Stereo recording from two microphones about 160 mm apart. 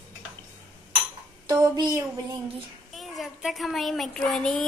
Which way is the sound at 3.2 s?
Centre (ahead or behind).